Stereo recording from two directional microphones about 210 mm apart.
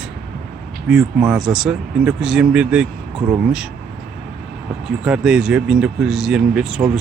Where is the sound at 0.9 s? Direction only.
5° right (ahead or behind).